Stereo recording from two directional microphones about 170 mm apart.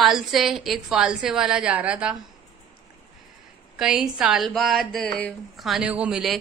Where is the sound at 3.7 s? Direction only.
5° right (ahead or behind).